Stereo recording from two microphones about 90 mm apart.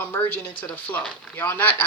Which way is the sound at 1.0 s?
5° left (ahead or behind).